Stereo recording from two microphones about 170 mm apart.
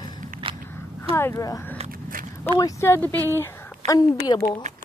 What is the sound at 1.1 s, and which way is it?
Speech, 15° left (ahead or behind).